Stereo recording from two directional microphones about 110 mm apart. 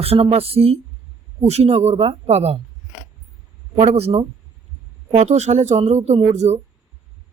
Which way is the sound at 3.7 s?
65° right (ahead or behind).